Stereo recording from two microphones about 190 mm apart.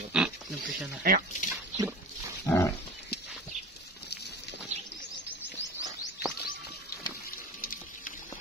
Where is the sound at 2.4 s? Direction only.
15° left (ahead or behind).